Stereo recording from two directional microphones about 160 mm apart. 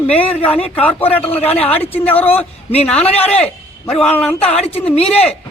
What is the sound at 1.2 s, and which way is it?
Speech, 40° left (ahead or behind).